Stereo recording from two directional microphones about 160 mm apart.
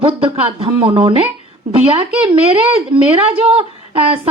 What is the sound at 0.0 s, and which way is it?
A woman's voice, 35° right (ahead or behind).